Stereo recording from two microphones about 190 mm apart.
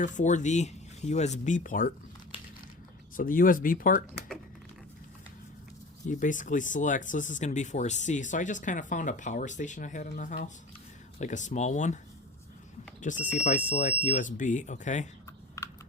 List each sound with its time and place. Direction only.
0.0 s speech: 40° left (ahead or behind)
3.2 s speech: 45° left (ahead or behind)
6.1 s speech: 40° left (ahead or behind)
13.0 s speech: 40° left (ahead or behind)
15.6 s computer keyboard: 15° left (ahead or behind)